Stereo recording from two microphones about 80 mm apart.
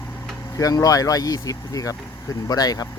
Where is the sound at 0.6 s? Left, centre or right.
Left.